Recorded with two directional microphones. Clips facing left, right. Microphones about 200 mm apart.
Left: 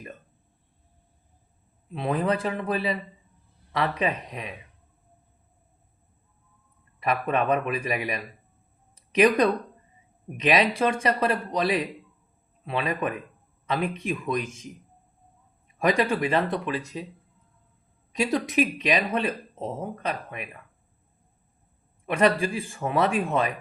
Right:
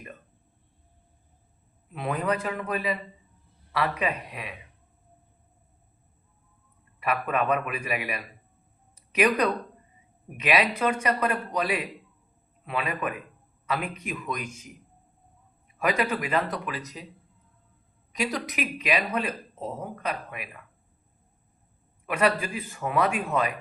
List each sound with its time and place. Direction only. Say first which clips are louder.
1.9 s speech: left 3 dB; 30° left (ahead or behind)
7.0 s speech: left 2 dB; 35° left (ahead or behind)
15.8 s speech: left 3 dB; 35° left (ahead or behind)
18.2 s speech: left 6 dB; 25° left (ahead or behind)
22.0 s speech: left 3 dB; 30° left (ahead or behind)